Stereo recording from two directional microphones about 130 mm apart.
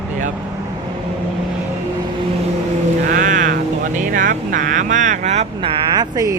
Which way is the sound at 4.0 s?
90° right.